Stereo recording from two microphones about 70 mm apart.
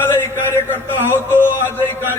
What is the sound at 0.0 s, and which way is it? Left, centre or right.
Music, left.